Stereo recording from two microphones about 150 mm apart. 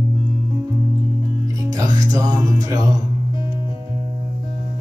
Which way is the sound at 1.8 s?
20° right (ahead or behind).